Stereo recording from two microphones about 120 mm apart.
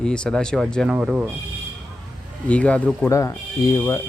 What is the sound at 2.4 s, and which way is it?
Speech, 10° left (ahead or behind).